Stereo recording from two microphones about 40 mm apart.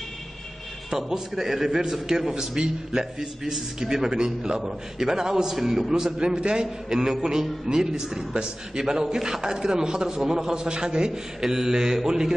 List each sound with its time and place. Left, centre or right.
0.8 s a man's voice: centre